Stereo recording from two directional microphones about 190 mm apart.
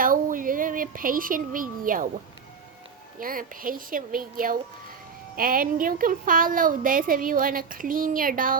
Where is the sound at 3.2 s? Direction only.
45° right (ahead or behind).